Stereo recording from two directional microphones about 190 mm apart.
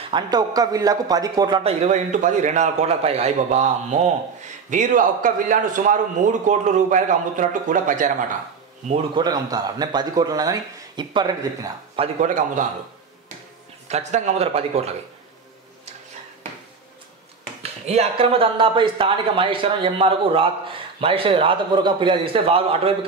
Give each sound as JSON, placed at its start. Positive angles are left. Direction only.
{"t": 0.1, "sound": "a man's voice", "side_deg": -20}
{"t": 9.2, "sound": "speech", "side_deg": -20}
{"t": 13.8, "sound": "speech", "side_deg": -35}
{"t": 17.6, "sound": "speech", "side_deg": -35}